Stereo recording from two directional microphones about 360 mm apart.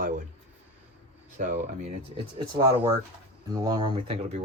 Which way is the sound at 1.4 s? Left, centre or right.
Right.